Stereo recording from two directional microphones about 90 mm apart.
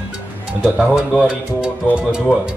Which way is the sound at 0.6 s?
5° right (ahead or behind).